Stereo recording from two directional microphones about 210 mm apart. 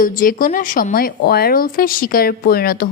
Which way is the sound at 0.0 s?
40° left (ahead or behind).